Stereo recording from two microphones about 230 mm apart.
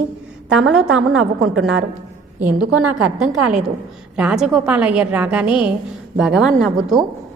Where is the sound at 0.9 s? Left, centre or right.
Right.